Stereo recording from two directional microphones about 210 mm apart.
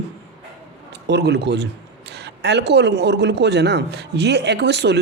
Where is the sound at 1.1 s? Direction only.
55° right (ahead or behind).